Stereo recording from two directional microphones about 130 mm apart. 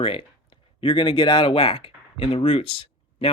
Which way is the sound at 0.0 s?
45° left (ahead or behind).